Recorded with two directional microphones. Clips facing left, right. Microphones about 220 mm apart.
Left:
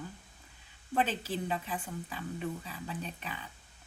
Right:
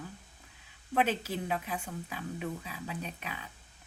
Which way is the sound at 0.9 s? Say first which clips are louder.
Right 2 dB; 10° right (ahead or behind).